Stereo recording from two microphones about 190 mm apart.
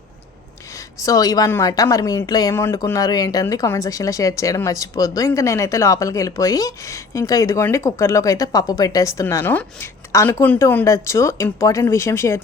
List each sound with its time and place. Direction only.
0.8 s a woman's voice: 20° left (ahead or behind)